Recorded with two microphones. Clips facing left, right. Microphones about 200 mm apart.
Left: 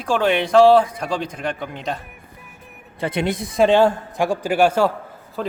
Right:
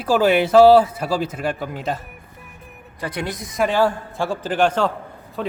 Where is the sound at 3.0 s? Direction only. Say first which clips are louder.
Left 5 dB; 25° left (ahead or behind).